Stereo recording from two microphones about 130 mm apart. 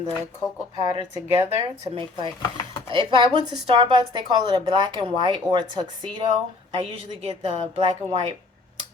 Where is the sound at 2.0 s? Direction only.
40° right (ahead or behind).